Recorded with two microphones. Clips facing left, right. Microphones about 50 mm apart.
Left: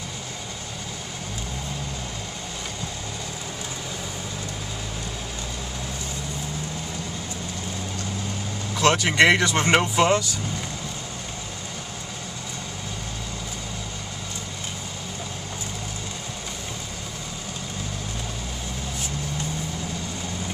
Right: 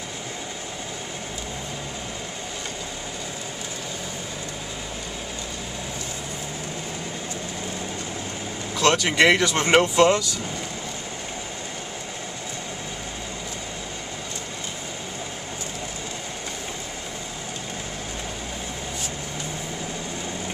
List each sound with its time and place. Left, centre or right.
8.7 s speech: centre
9.2 s speech: centre